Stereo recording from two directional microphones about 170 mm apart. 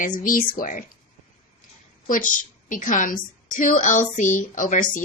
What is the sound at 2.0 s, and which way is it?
A woman's voice, 50° left (ahead or behind).